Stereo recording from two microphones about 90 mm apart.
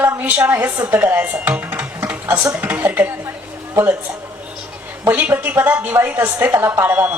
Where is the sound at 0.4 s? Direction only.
20° right (ahead or behind).